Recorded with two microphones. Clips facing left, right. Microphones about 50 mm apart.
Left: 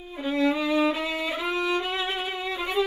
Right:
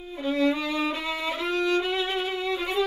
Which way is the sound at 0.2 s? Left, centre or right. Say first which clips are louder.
Even; centre.